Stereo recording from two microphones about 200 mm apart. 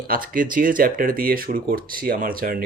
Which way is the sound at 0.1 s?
45° right (ahead or behind).